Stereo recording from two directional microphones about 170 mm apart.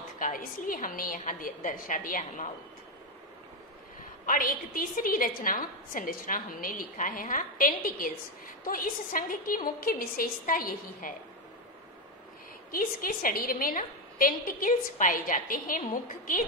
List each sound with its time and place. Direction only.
0.2 s a woman's voice: 55° left (ahead or behind)
4.3 s a woman's voice: 55° left (ahead or behind)
12.7 s a woman's voice: 55° left (ahead or behind)